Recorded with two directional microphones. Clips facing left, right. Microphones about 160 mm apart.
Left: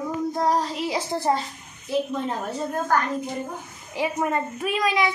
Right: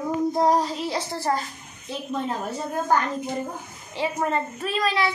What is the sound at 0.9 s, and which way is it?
Speech, 20° left (ahead or behind).